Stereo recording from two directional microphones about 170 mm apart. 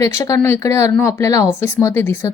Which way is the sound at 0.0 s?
20° left (ahead or behind).